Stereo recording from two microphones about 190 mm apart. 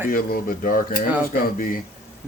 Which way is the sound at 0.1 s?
50° left (ahead or behind).